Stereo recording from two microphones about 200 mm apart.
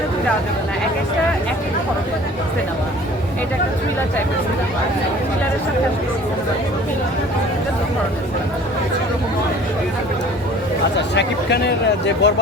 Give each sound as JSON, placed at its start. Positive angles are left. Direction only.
{"t": 11.1, "sound": "speech", "side_deg": 60}